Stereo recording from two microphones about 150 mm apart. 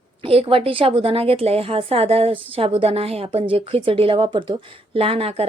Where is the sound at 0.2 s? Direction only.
40° right (ahead or behind).